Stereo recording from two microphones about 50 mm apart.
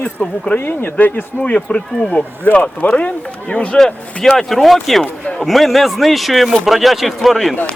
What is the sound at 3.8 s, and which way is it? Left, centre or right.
Speech, centre.